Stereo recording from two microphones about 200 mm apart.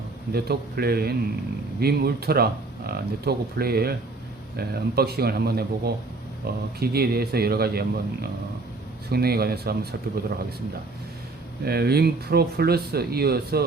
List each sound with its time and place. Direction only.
0.3 s speech: 50° right (ahead or behind)
11.6 s speech: 50° right (ahead or behind)